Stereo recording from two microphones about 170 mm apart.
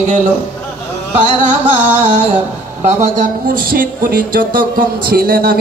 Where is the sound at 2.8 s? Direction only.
45° right (ahead or behind); by 5.5 s 60° right (ahead or behind).